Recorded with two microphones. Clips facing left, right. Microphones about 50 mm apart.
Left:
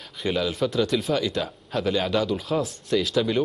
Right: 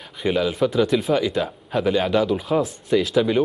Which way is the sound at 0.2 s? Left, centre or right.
Centre.